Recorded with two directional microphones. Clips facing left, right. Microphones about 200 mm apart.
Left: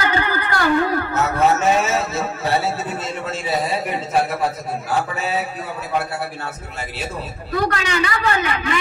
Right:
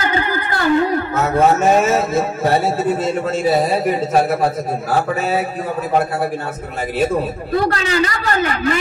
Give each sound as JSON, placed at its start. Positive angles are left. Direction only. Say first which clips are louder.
{"t": 0.1, "sound": "a sound", "louder": "right 1 dB", "side_deg": -15}
{"t": 1.6, "sound": "a man's voice", "louder": "right 4 dB", "side_deg": -50}
{"t": 7.5, "sound": "a man's voice", "louder": "right 3 dB", "side_deg": -30}